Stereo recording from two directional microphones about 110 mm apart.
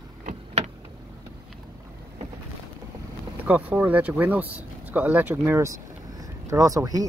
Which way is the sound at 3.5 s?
15° right (ahead or behind).